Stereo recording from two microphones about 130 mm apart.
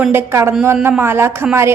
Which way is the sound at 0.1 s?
20° right (ahead or behind).